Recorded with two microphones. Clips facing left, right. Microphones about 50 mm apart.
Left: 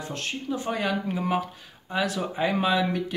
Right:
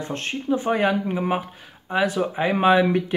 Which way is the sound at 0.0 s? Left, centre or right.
Right.